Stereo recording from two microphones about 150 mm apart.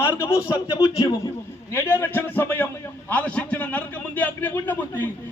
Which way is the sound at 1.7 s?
15° left (ahead or behind).